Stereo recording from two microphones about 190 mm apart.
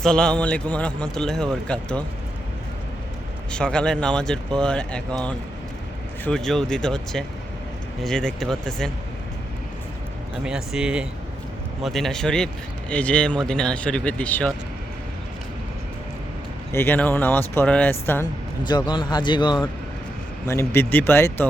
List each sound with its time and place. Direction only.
0.0 s a man's voice: 5° left (ahead or behind)
3.5 s a man's voice: 5° left (ahead or behind)
10.4 s a man's voice: 5° right (ahead or behind)
16.7 s speech: 10° left (ahead or behind)
18.9 s speech: 25° left (ahead or behind)
20.5 s speech: 15° left (ahead or behind)